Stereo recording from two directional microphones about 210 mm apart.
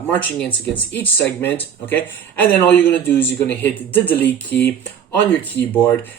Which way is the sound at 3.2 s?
10° left (ahead or behind).